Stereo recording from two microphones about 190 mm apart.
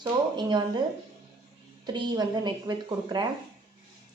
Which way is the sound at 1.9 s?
20° right (ahead or behind).